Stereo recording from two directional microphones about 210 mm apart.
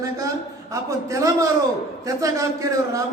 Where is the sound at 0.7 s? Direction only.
15° right (ahead or behind).